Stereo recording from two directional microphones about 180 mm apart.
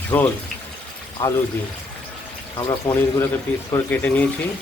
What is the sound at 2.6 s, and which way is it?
Speech, 15° left (ahead or behind).